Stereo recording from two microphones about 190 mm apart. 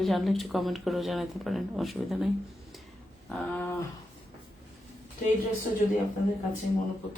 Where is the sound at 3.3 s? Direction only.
5° left (ahead or behind).